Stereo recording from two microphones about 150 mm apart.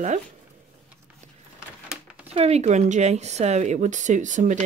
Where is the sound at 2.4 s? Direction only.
45° right (ahead or behind).